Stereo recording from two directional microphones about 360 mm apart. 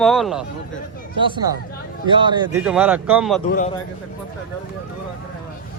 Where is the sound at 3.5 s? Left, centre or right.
Left.